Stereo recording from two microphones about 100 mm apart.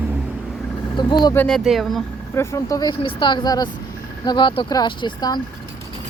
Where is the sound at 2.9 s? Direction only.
55° left (ahead or behind).